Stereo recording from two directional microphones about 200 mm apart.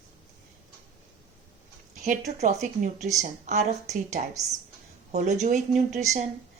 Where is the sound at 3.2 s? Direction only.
35° right (ahead or behind).